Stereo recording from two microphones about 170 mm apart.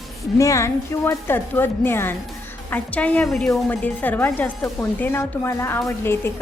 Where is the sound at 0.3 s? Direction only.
20° left (ahead or behind).